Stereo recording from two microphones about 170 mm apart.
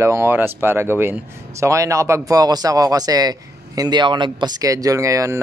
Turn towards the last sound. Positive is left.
turn(degrees=-20)  # may be behind; listen again after turning